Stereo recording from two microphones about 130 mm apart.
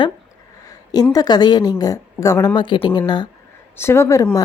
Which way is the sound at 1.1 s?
35° left (ahead or behind).